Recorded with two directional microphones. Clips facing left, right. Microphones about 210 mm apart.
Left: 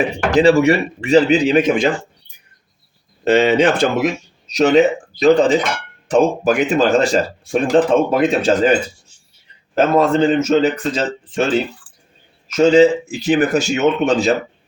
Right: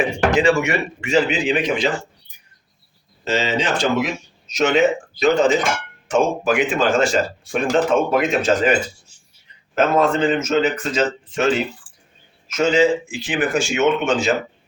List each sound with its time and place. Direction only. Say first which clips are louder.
0.3 s speech: left 6 dB; 35° left (ahead or behind)
3.2 s speech: left 8 dB; 60° left (ahead or behind)
4.4 s speech: left 4 dB; 35° left (ahead or behind)
9.7 s speech: left 3 dB; 35° left (ahead or behind)
12.5 s speech: left 6 dB; 35° left (ahead or behind)